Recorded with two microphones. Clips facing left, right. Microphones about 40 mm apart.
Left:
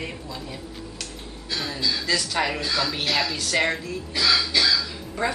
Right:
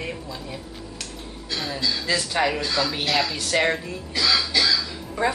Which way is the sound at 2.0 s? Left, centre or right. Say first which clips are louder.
Right 1 dB; centre.